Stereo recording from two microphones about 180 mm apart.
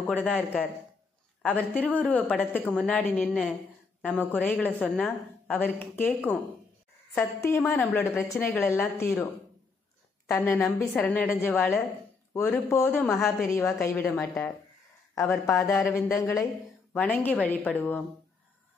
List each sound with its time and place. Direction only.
0.0 s a woman's voice: 5° left (ahead or behind)